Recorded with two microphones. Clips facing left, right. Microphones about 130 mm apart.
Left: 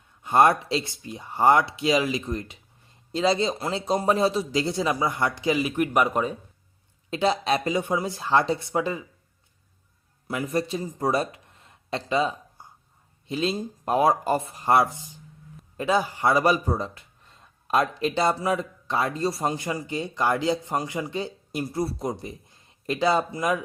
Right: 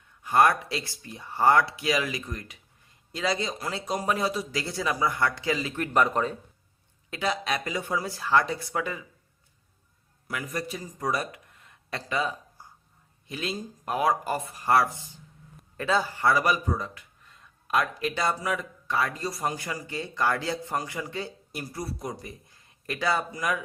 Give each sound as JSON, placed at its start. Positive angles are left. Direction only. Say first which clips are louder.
{"t": 0.2, "sound": "speech", "louder": "left 3 dB", "side_deg": 25}
{"t": 7.1, "sound": "speech", "louder": "left 6 dB", "side_deg": 25}
{"t": 10.2, "sound": "speech", "louder": "left 6 dB", "side_deg": 25}